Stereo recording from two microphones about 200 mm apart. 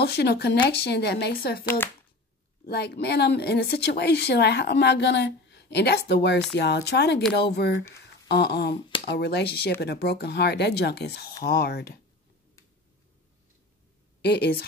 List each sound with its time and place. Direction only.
0.0 s speech: 55° left (ahead or behind)
14.2 s speech: 50° left (ahead or behind)